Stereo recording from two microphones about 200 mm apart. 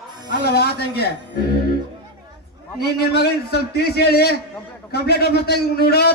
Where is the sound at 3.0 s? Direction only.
55° left (ahead or behind).